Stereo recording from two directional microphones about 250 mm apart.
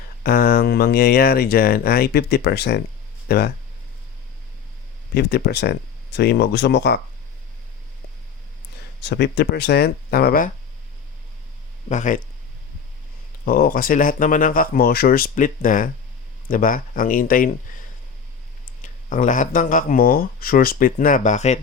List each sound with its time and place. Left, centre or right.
0.2 s speech: left
5.1 s speech: left
9.0 s speech: left
11.9 s speech: left
13.4 s speech: left
18.6 s speech: left